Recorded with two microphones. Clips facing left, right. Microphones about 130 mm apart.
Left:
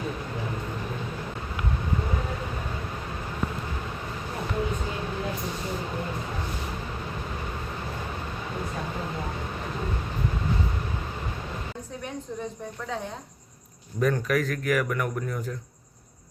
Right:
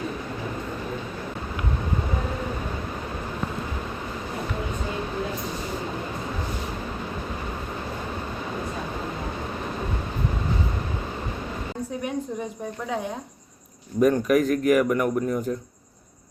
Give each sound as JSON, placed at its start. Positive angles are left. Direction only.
{"t": 14.0, "sound": "a man's voice", "side_deg": -20}